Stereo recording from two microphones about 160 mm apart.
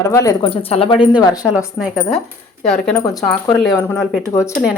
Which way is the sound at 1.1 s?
25° left (ahead or behind).